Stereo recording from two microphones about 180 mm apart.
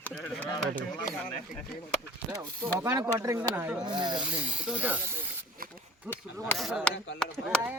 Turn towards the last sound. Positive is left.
turn(degrees=5)  # may be behind; listen again after turning